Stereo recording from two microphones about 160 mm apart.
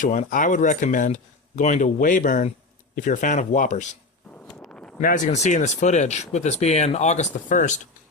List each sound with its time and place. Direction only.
0.0 s speech: 55° left (ahead or behind)
4.4 s a sound: 5° left (ahead or behind)
4.9 s speech: 55° left (ahead or behind)